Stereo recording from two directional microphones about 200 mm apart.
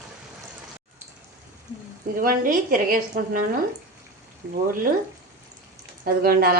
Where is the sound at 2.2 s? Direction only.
45° right (ahead or behind).